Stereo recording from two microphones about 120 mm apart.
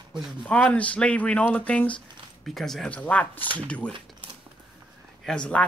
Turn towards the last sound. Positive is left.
turn(degrees=10)  # may be behind; listen again after turning